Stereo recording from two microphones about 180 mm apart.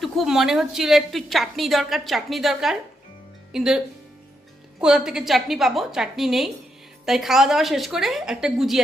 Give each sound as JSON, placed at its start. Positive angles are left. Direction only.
{"t": 0.0, "sound": "a woman's voice", "side_deg": 0}